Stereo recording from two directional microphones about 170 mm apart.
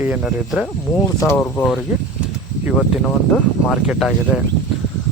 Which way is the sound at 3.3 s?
5° right (ahead or behind).